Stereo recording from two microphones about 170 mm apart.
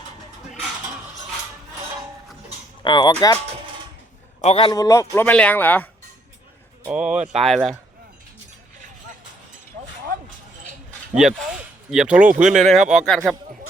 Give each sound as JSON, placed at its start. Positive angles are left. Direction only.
{"t": 2.8, "sound": "speech", "side_deg": 25}
{"t": 4.4, "sound": "speech", "side_deg": 35}
{"t": 6.8, "sound": "speech", "side_deg": -5}
{"t": 11.1, "sound": "speech", "side_deg": 0}